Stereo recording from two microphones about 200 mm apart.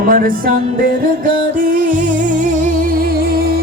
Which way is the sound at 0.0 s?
45° right (ahead or behind).